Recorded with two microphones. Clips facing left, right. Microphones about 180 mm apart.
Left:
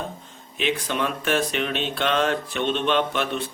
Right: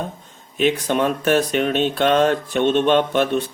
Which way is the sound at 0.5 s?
45° right (ahead or behind).